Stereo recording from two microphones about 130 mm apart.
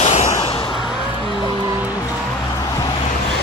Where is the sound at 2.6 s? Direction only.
30° left (ahead or behind).